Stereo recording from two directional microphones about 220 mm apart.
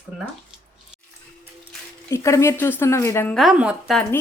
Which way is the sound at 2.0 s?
15° left (ahead or behind).